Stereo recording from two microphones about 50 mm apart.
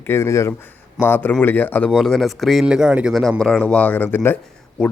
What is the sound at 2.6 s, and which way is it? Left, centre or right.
Speech, centre.